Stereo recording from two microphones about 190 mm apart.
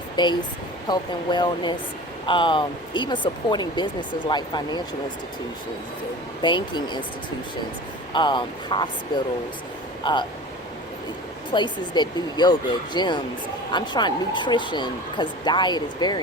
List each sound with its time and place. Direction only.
0.2 s speech: 25° left (ahead or behind)
6.4 s speech: 25° left (ahead or behind)
8.1 s speech: 25° left (ahead or behind)
10.0 s speech: 25° left (ahead or behind)
11.5 s speech: 25° left (ahead or behind)